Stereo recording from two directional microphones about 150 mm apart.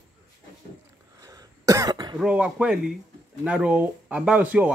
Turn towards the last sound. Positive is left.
turn(degrees=-10)  # may be behind; listen again after turning